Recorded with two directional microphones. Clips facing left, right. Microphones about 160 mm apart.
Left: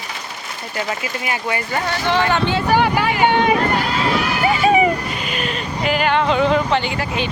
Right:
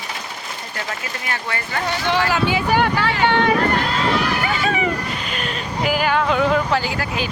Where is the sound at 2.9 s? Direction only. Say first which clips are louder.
Left 2 dB; 15° left (ahead or behind).